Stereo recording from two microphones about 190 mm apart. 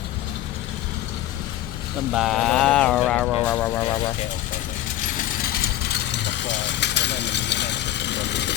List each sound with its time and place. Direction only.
2.1 s speech: centre (ahead or behind)
5.9 s vehicle: 65° left (ahead or behind)